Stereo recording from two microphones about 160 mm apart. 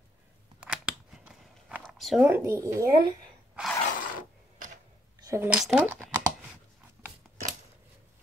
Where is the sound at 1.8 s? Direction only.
Centre (ahead or behind).